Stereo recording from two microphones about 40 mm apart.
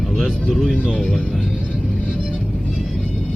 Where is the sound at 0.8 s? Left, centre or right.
Centre.